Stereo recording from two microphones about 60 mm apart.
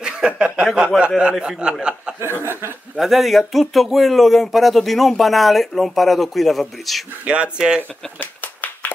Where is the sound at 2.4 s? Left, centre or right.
Right.